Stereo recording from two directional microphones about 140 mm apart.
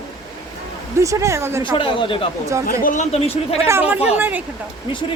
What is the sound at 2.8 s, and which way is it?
Speech, 60° left (ahead or behind).